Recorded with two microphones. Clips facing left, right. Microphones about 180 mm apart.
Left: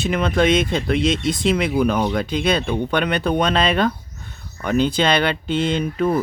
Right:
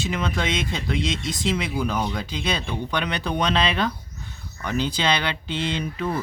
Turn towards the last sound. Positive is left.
turn(degrees=50)  # may be behind; listen again after turning